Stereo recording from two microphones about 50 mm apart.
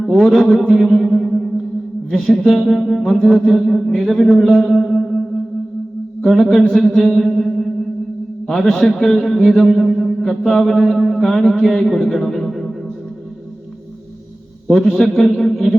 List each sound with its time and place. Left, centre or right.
0.0 s a man's voice: centre
0.9 s music: centre
2.0 s speech: centre
7.2 s music: centre
8.4 s a man's voice: centre
11.8 s music: centre
14.9 s speech: centre